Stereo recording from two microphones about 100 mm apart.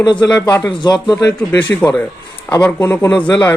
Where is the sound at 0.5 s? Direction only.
40° left (ahead or behind).